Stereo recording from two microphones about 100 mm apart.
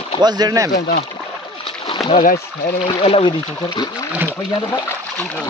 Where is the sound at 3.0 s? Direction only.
75° left (ahead or behind).